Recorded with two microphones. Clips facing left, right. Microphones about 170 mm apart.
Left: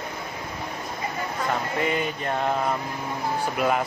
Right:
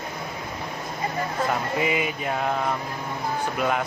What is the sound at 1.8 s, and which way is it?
Mantra, 5° right (ahead or behind).